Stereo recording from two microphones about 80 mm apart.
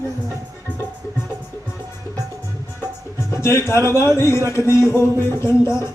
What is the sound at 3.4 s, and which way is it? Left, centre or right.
Speech, left.